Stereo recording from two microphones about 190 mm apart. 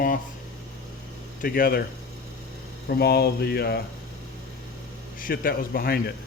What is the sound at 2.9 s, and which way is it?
Speech, 55° left (ahead or behind).